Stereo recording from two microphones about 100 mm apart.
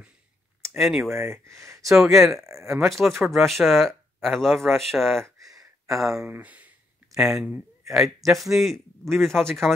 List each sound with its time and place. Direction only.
0.7 s speech: centre (ahead or behind)
1.1 s speech: 25° right (ahead or behind)
2.0 s speech: centre (ahead or behind)
2.3 s speech: 30° right (ahead or behind)
2.9 s speech: centre (ahead or behind)
6.2 s speech: 20° right (ahead or behind)
7.1 s a man's voice: 5° right (ahead or behind)